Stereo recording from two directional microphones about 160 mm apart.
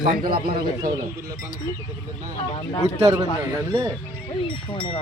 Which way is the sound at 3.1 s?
20° right (ahead or behind).